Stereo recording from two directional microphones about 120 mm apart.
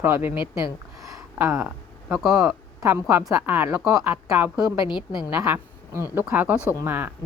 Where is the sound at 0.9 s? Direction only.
25° right (ahead or behind).